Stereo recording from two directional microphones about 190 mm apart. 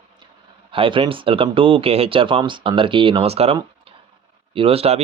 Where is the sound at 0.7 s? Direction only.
25° right (ahead or behind).